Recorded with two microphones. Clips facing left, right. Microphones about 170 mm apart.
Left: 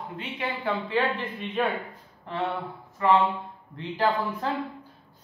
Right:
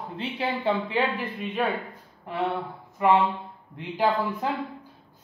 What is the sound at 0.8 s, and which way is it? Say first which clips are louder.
Speech: even; 10° right (ahead or behind).